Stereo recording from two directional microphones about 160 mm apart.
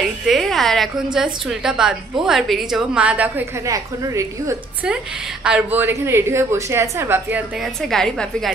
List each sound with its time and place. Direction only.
0.3 s a woman's voice: centre (ahead or behind)
3.6 s a woman's voice: 20° right (ahead or behind)
5.4 s a woman's voice: 10° right (ahead or behind)